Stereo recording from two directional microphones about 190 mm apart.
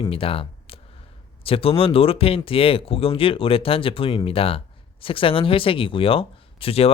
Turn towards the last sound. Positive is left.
turn(degrees=30)  # may be behind; listen again after turning